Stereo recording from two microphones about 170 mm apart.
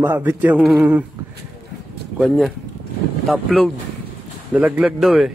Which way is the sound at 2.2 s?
Centre (ahead or behind).